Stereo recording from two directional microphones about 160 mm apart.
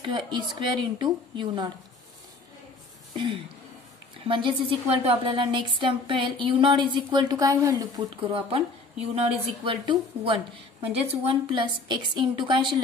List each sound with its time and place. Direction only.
0.0 s a woman's voice: 30° right (ahead or behind)
4.3 s a woman's voice: 30° right (ahead or behind)